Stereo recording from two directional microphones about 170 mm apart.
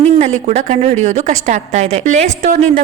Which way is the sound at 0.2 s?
45° right (ahead or behind).